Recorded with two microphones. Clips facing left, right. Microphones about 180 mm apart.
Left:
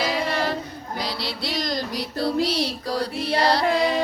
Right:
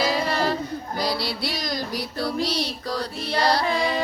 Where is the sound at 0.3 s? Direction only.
35° right (ahead or behind).